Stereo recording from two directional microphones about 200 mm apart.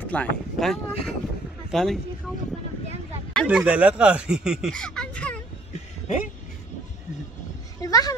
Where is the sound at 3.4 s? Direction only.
5° right (ahead or behind).